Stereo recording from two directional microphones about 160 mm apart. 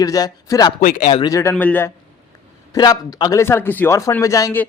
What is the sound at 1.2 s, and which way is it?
Speech, 20° left (ahead or behind).